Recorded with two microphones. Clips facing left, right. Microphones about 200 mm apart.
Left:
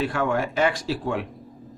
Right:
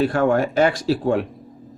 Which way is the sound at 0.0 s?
40° right (ahead or behind).